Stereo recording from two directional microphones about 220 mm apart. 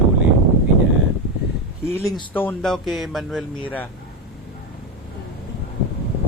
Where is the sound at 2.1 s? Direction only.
10° left (ahead or behind).